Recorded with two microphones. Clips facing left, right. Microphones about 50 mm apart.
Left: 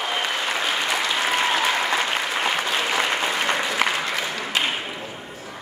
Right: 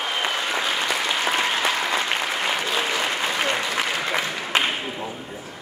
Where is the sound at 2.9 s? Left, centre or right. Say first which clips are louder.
Left 2 dB; centre.